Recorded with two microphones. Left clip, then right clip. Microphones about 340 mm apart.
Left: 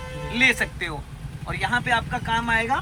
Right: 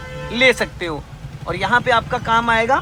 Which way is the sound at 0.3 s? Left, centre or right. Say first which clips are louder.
Right 5 dB; centre.